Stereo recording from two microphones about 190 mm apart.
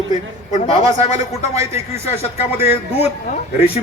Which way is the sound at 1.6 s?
15° right (ahead or behind).